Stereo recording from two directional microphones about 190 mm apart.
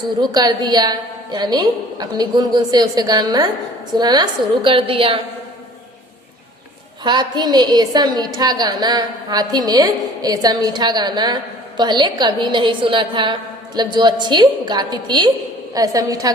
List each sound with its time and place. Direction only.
0.2 s a woman's voice: 20° right (ahead or behind)
7.0 s a woman's voice: 25° right (ahead or behind)